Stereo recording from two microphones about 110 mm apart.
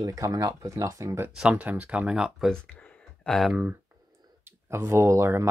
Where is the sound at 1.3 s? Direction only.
10° right (ahead or behind).